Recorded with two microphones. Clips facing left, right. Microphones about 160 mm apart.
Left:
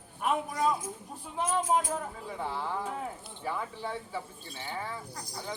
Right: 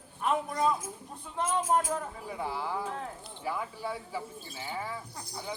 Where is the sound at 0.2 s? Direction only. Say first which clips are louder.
Right 1 dB; 10° left (ahead or behind).